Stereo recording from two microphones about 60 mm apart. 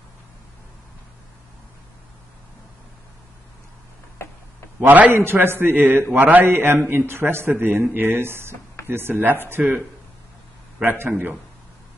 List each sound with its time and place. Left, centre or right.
4.7 s a man's voice: right
10.8 s speech: right